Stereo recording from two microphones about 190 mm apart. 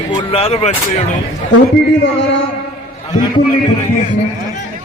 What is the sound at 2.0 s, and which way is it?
Speech, 75° left (ahead or behind).